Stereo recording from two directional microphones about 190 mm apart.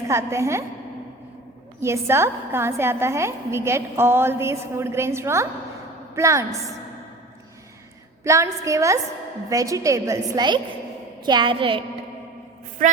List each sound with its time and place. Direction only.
0.1 s a woman's voice: 15° right (ahead or behind)
1.8 s a woman's voice: 15° right (ahead or behind)
8.2 s a woman's voice: 15° right (ahead or behind)
12.8 s a man's voice: 45° right (ahead or behind)